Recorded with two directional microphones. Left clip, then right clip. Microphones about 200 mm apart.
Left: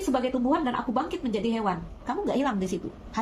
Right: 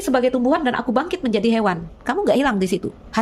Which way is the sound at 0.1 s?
55° right (ahead or behind).